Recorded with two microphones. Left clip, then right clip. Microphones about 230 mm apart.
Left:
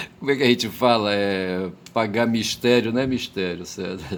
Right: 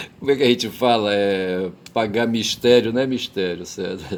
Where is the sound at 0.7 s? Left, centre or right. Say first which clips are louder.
Right 1 dB; left.